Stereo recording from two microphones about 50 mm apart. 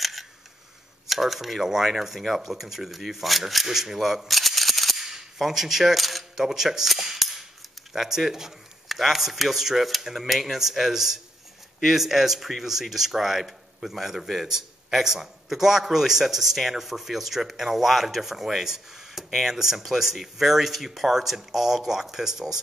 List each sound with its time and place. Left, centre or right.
0.0 s camera: centre
1.0 s a man's voice: centre